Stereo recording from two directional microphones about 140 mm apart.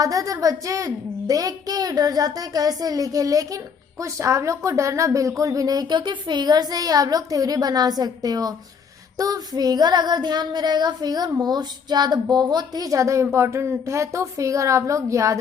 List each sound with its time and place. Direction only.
0.0 s speech: 25° right (ahead or behind)